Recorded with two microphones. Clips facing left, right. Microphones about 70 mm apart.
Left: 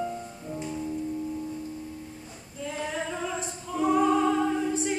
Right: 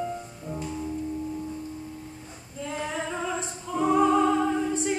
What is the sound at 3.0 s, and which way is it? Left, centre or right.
Music, centre.